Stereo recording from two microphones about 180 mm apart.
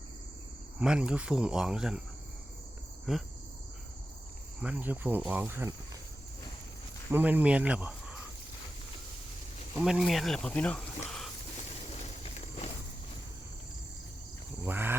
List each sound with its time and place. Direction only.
0.8 s speech: 5° right (ahead or behind)
3.1 s speech: centre (ahead or behind)
4.6 s cricket: 10° right (ahead or behind)
7.1 s speech: 10° right (ahead or behind)
9.7 s speech: 5° right (ahead or behind)
12.0 s walk: 40° left (ahead or behind)
14.6 s speech: 10° right (ahead or behind)